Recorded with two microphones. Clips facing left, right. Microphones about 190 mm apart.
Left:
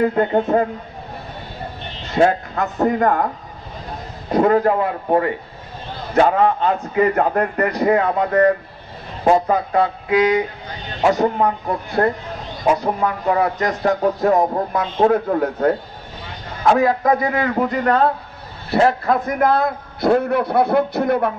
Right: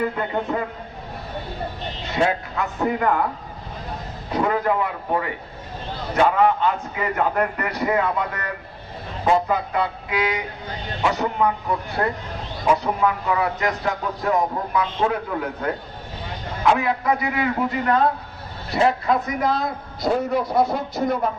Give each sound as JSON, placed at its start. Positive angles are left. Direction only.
{"t": 0.0, "sound": "speech", "side_deg": 45}
{"t": 2.0, "sound": "speech", "side_deg": 40}
{"t": 4.3, "sound": "speech", "side_deg": 40}
{"t": 16.7, "sound": "speech", "side_deg": 40}
{"t": 18.7, "sound": "a man's voice", "side_deg": 55}